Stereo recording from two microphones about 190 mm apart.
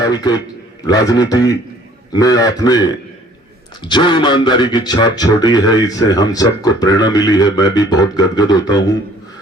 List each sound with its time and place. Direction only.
0.0 s a man's voice: 20° left (ahead or behind)